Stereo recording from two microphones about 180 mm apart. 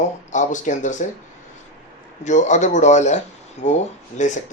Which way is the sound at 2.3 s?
40° left (ahead or behind).